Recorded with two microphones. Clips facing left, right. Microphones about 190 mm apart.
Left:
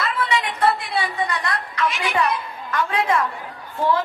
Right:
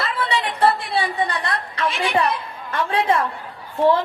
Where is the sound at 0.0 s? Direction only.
30° right (ahead or behind).